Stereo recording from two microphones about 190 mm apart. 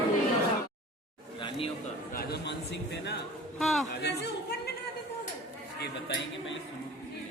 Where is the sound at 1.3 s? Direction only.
25° left (ahead or behind).